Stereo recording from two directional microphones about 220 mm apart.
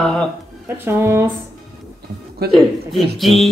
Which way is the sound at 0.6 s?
10° right (ahead or behind).